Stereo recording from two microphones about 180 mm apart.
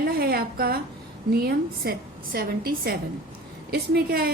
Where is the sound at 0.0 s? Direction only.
55° right (ahead or behind).